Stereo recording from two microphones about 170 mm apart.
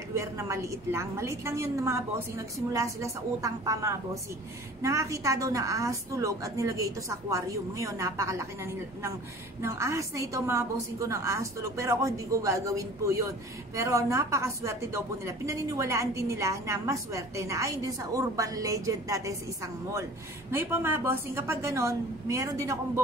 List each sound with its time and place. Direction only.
0.1 s a woman's voice: 15° right (ahead or behind)